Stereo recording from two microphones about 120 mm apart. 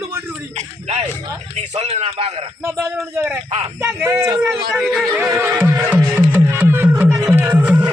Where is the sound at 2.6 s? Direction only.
20° right (ahead or behind).